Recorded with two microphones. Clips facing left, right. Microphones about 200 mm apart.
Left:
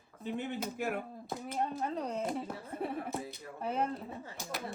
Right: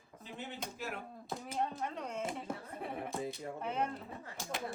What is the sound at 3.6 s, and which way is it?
Speech, 30° left (ahead or behind).